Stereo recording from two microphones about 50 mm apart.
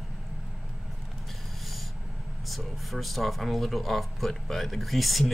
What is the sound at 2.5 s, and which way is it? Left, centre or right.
Speech, centre.